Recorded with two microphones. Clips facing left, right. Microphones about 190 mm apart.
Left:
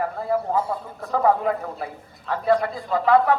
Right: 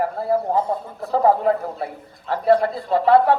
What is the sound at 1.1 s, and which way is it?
A man's voice, 30° right (ahead or behind).